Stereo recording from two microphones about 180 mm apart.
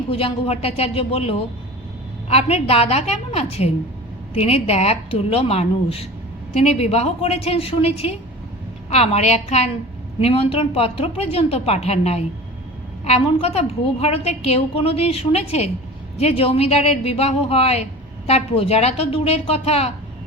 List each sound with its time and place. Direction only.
0.1 s a woman's voice: 30° left (ahead or behind)